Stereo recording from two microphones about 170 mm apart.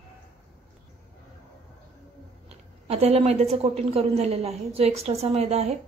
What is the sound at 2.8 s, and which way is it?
A woman's voice, 35° right (ahead or behind).